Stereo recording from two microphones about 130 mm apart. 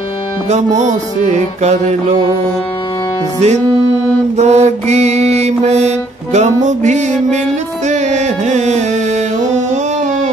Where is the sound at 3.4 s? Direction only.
60° right (ahead or behind).